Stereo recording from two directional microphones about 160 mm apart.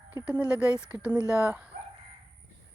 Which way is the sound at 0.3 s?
10° right (ahead or behind).